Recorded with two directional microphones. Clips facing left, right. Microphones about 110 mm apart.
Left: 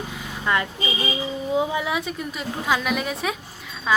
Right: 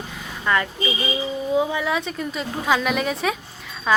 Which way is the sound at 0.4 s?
15° left (ahead or behind).